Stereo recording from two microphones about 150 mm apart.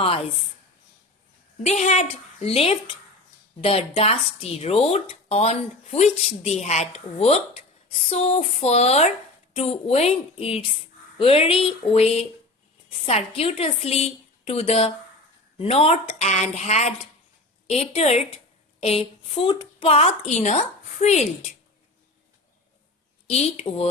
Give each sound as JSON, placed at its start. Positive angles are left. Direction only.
{"t": 1.5, "sound": "a woman's voice", "side_deg": 45}
{"t": 23.3, "sound": "speech", "side_deg": 45}